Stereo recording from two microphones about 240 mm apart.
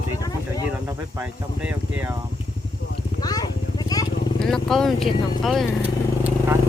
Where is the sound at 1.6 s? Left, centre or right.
Centre.